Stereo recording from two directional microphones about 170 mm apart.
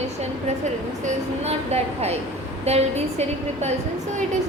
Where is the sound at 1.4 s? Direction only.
40° right (ahead or behind).